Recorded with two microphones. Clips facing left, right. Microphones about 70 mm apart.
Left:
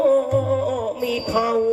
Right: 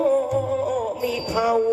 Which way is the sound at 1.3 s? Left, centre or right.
Left.